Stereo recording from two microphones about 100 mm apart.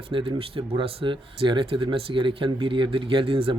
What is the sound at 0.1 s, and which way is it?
Speech, 60° right (ahead or behind).